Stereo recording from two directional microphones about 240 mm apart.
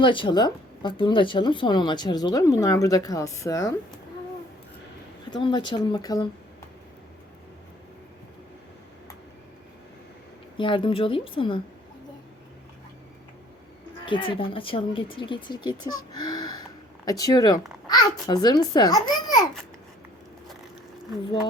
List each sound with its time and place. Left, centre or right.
0.0 s speech: centre
5.4 s speech: centre
10.6 s speech: left
14.0 s speech: left
16.1 s a sound: centre
17.1 s speech: centre